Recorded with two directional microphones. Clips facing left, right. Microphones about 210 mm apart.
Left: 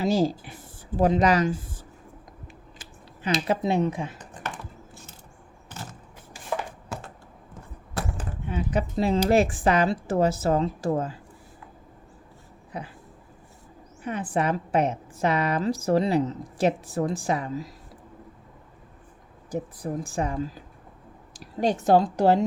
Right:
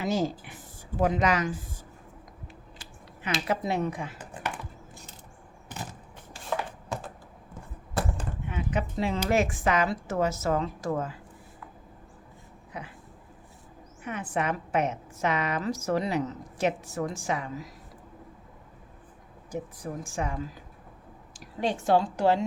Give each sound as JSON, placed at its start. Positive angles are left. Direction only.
{"t": 0.0, "sound": "a woman's voice", "side_deg": 35}
{"t": 3.2, "sound": "speech", "side_deg": 30}
{"t": 4.2, "sound": "computer keyboard", "side_deg": -10}
{"t": 6.3, "sound": "chopping", "side_deg": 5}
{"t": 8.4, "sound": "a woman's voice", "side_deg": 35}
{"t": 12.7, "sound": "a woman's voice", "side_deg": 35}
{"t": 14.0, "sound": "a woman's voice", "side_deg": 30}
{"t": 19.5, "sound": "a woman's voice", "side_deg": 35}